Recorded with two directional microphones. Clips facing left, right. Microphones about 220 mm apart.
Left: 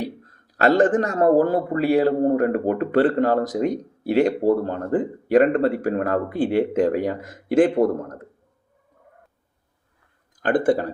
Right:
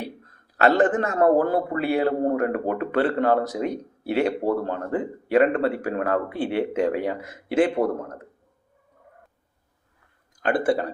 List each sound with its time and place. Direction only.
0.5 s speech: 45° left (ahead or behind)
10.4 s speech: 50° left (ahead or behind)